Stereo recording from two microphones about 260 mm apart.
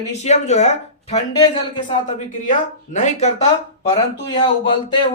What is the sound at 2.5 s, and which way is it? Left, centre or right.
Speech, left.